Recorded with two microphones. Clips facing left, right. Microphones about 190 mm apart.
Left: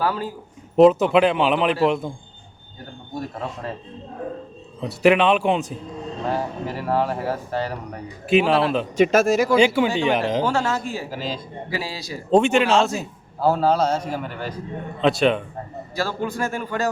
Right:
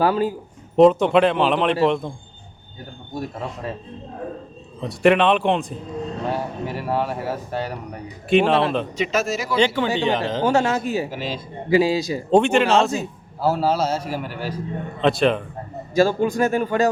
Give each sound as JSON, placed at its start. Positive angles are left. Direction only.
{"t": 0.0, "sound": "speech", "side_deg": -15}
{"t": 0.8, "sound": "a man's voice", "side_deg": 0}
{"t": 4.8, "sound": "a man's voice", "side_deg": 0}
{"t": 8.3, "sound": "a man's voice", "side_deg": 0}
{"t": 9.0, "sound": "speech", "side_deg": 50}
{"t": 9.6, "sound": "speech", "side_deg": 10}
{"t": 10.4, "sound": "speech", "side_deg": -20}
{"t": 11.1, "sound": "a man's voice", "side_deg": -5}
{"t": 11.7, "sound": "a man's voice", "side_deg": -20}
{"t": 12.3, "sound": "a man's voice", "side_deg": 0}
{"t": 16.0, "sound": "speech", "side_deg": -15}